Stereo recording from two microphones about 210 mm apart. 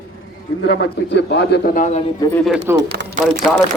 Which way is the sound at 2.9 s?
55° right (ahead or behind).